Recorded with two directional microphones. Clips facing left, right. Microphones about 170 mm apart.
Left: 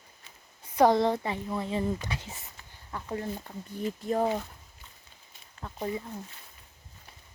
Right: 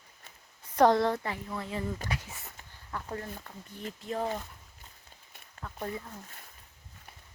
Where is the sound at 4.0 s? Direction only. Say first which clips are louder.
Left 5 dB; 45° left (ahead or behind).